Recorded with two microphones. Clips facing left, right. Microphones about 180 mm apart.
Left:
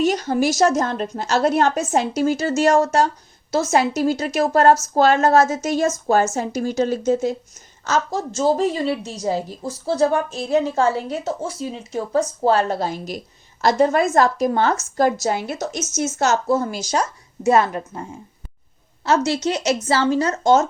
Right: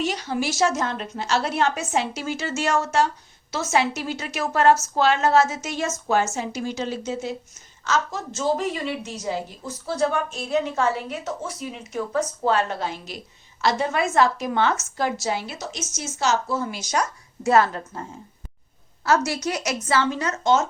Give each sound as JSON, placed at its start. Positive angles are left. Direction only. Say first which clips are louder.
{"t": 0.0, "sound": "a woman's voice", "louder": "left 7 dB", "side_deg": 45}
{"t": 19.0, "sound": "a woman's voice", "louder": "left 3 dB", "side_deg": 25}